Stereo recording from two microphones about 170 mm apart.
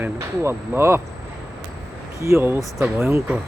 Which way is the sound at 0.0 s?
15° right (ahead or behind).